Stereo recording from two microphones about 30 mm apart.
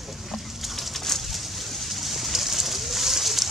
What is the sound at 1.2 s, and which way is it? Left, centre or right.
Pigeon, centre.